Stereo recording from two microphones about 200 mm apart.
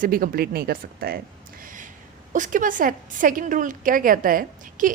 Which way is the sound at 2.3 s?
40° right (ahead or behind).